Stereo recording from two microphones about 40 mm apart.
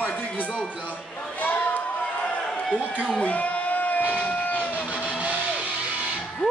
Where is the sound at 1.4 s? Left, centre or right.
Left.